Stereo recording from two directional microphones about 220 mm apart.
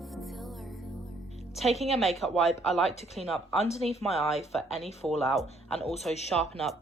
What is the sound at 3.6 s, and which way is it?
Speech, 30° left (ahead or behind).